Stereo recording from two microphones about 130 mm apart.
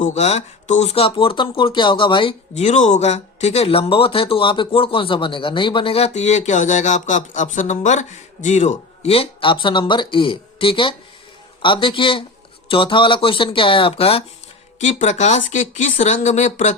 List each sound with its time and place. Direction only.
0.0 s speech: 60° left (ahead or behind); by 2.3 s 40° left (ahead or behind)
2.6 s speech: 65° left (ahead or behind); by 14.3 s 50° left (ahead or behind)
14.8 s speech: 65° left (ahead or behind)